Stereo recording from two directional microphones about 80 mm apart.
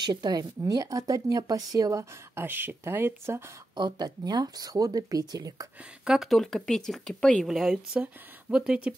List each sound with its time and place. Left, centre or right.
0.0 s speech: right
0.6 s speech: right
2.3 s speech: right
3.7 s speech: right
6.0 s speech: centre
7.4 s speech: centre